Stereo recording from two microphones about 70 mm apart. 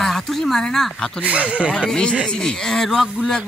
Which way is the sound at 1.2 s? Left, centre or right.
Centre.